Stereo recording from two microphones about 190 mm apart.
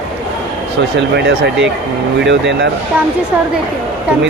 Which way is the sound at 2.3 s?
70° right (ahead or behind).